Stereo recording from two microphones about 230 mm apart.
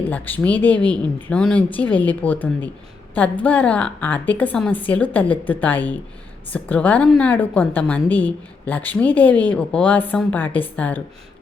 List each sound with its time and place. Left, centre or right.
0.1 s a woman's voice: centre